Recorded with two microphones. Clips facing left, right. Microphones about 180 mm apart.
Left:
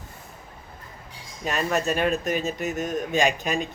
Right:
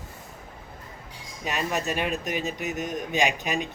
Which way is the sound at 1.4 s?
15° right (ahead or behind).